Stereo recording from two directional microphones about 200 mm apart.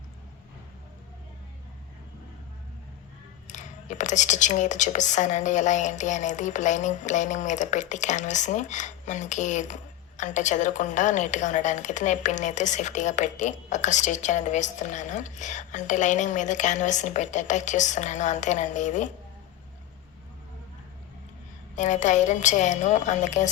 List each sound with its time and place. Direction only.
3.4 s a woman's voice: 40° left (ahead or behind)
21.8 s a woman's voice: 40° left (ahead or behind)